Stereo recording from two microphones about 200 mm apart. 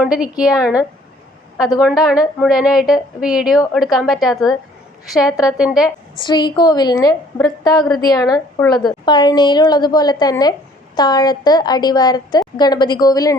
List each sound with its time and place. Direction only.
0.0 s a woman's voice: 5° right (ahead or behind)
6.1 s a woman's voice: 20° left (ahead or behind)